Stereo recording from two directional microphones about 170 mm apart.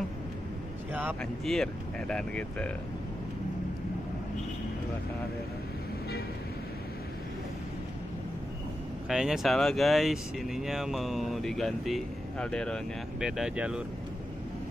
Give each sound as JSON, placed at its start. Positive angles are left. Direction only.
{"t": 1.4, "sound": "speech", "side_deg": 0}
{"t": 9.1, "sound": "speech", "side_deg": -5}